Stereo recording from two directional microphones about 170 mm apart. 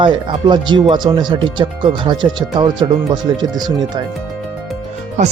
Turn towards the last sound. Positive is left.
turn(degrees=-45)  # may be behind; listen again after turning